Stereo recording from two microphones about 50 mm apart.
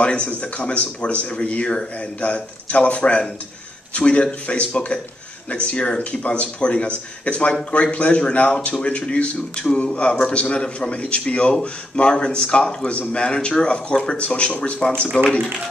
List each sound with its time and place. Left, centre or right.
0.0 s speech: left